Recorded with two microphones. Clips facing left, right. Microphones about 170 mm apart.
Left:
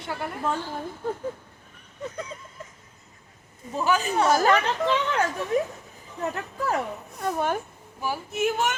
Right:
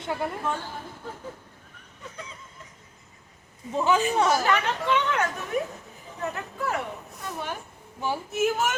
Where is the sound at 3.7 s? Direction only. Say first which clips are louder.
Right 1 dB; 20° right (ahead or behind).